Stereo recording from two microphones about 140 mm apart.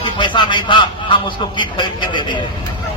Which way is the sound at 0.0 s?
35° left (ahead or behind).